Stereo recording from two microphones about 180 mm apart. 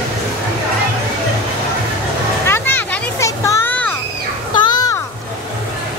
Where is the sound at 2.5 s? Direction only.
10° left (ahead or behind).